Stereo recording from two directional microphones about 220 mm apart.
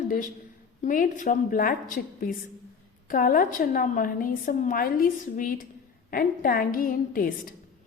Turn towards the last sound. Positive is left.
turn(degrees=40)  # may be behind; listen again after turning